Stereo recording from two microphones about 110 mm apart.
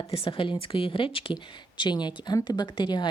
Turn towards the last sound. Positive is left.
turn(degrees=45)  # may be behind; listen again after turning